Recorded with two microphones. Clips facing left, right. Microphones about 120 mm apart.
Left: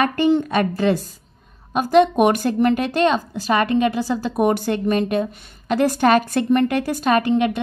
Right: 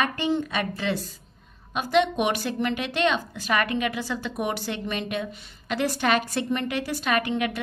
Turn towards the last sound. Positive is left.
turn(degrees=35)  # may be behind; listen again after turning